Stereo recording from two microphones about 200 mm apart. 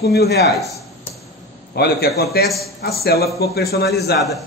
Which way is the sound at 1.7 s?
50° left (ahead or behind).